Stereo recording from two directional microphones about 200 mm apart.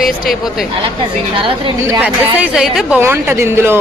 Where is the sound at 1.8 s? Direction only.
10° right (ahead or behind).